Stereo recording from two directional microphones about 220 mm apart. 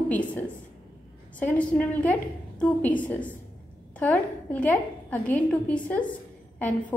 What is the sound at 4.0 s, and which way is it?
A woman's voice, 5° left (ahead or behind).